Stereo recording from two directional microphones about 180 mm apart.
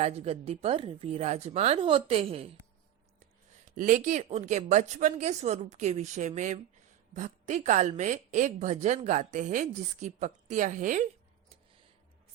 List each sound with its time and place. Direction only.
0.0 s a woman's voice: 35° right (ahead or behind)
3.8 s a woman's voice: 45° right (ahead or behind)